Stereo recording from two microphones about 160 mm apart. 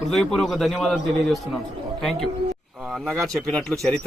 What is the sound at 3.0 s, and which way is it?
Speech, 20° right (ahead or behind).